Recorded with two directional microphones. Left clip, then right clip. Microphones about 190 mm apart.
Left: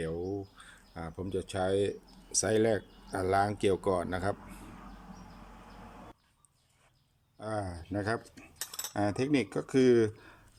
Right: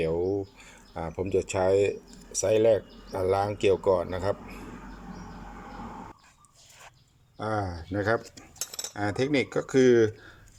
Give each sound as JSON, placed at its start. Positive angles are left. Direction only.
{"t": 0.9, "sound": "speech", "side_deg": 10}
{"t": 7.3, "sound": "speech", "side_deg": 5}